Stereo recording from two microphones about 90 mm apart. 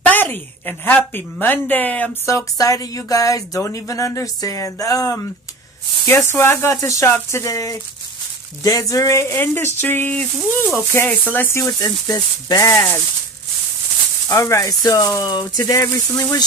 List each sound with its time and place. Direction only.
0.0 s a woman's voice: 20° left (ahead or behind)
2.2 s speech: 35° left (ahead or behind)
6.0 s a woman's voice: 25° left (ahead or behind)
11.8 s speech: 45° left (ahead or behind); by 13.0 s 30° left (ahead or behind)
14.3 s speech: 35° left (ahead or behind)